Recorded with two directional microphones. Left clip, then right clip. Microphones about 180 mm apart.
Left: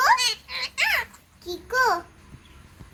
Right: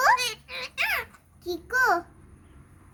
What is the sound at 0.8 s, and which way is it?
Babbling, 35° right (ahead or behind).